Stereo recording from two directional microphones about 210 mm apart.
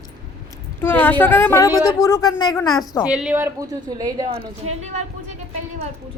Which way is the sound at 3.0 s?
5° right (ahead or behind).